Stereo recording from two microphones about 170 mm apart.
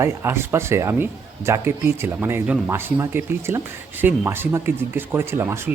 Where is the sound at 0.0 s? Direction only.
15° right (ahead or behind).